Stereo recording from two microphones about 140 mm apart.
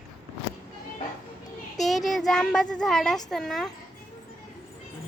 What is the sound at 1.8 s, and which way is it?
A child's voice, centre (ahead or behind).